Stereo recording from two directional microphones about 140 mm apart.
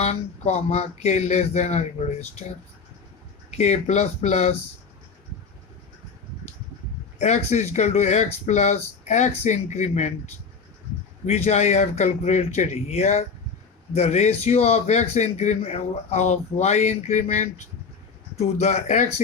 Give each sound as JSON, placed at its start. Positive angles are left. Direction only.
{"t": 0.0, "sound": "a man's voice", "side_deg": 50}
{"t": 3.5, "sound": "a man's voice", "side_deg": 50}
{"t": 7.2, "sound": "a man's voice", "side_deg": 55}
{"t": 11.3, "sound": "a man's voice", "side_deg": 55}